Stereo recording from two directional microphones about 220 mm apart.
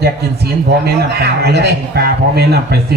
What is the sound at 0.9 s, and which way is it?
A man's voice, 45° right (ahead or behind).